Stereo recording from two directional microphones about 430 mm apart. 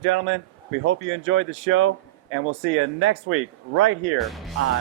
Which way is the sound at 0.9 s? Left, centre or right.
Right.